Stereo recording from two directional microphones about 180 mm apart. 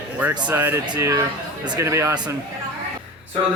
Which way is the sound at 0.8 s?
20° right (ahead or behind).